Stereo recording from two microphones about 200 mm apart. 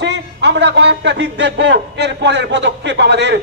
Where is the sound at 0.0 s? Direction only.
60° right (ahead or behind).